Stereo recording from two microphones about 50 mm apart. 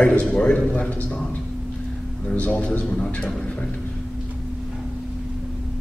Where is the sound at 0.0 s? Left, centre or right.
Left.